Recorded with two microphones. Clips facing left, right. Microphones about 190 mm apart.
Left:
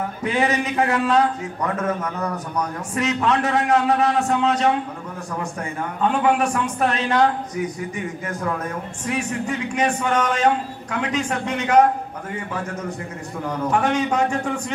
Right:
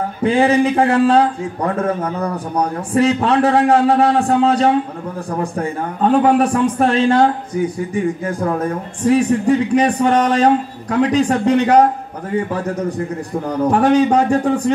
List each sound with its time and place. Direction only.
0.2 s a man's voice: 30° right (ahead or behind)
13.5 s a man's voice: 35° right (ahead or behind)